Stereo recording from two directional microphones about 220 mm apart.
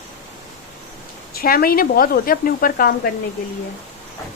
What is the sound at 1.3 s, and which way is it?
A woman's voice, 45° left (ahead or behind).